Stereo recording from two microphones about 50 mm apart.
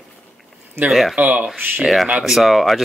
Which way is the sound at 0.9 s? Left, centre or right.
Centre.